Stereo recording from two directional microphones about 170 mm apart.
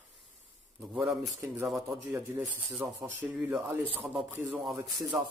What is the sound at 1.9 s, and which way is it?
Speech, 15° right (ahead or behind).